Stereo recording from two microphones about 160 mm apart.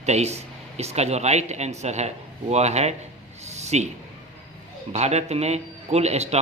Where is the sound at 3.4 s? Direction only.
45° right (ahead or behind).